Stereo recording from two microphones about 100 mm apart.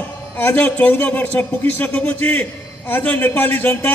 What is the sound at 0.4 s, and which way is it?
A man's voice, 20° left (ahead or behind).